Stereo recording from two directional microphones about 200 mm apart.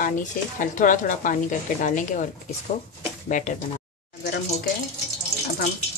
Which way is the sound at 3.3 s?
40° left (ahead or behind).